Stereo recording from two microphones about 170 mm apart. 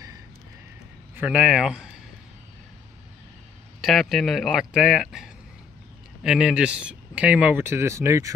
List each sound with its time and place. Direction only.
1.1 s speech: 10° right (ahead or behind)
3.8 s speech: centre (ahead or behind); by 8.3 s 15° right (ahead or behind)